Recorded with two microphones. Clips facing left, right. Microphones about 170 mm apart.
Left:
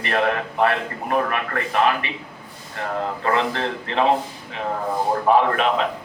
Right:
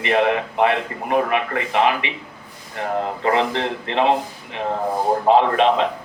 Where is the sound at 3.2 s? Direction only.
20° right (ahead or behind).